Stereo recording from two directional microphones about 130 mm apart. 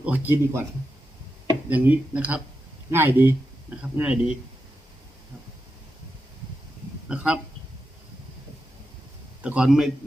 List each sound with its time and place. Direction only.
0.0 s speech: 15° right (ahead or behind)
1.7 s speech: 10° right (ahead or behind)
7.1 s speech: 5° right (ahead or behind)
9.4 s speech: 10° right (ahead or behind)